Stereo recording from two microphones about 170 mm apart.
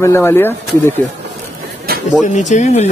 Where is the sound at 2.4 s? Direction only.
45° left (ahead or behind).